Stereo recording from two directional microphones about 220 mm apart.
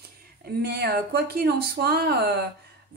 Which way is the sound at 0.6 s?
45° right (ahead or behind).